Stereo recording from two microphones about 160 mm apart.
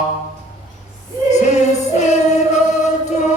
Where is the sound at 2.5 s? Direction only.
45° left (ahead or behind).